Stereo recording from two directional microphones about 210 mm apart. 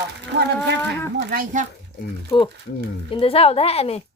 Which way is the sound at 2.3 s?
20° left (ahead or behind).